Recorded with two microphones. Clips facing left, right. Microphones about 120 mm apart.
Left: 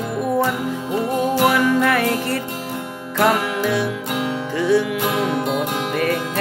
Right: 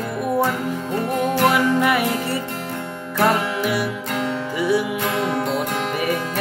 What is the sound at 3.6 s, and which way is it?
Music, 10° right (ahead or behind).